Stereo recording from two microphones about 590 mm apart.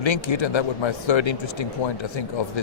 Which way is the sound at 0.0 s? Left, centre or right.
Left.